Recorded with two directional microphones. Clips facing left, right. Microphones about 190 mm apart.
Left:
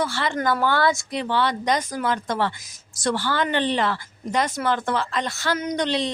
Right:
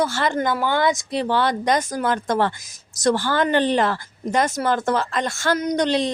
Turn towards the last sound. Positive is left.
turn(degrees=-45)  # may be behind; listen again after turning